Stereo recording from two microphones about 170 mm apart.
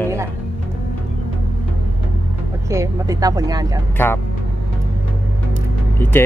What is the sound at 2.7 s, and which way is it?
Speech, 20° right (ahead or behind).